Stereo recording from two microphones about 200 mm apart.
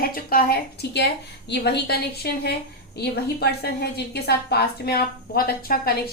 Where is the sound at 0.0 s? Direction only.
45° left (ahead or behind).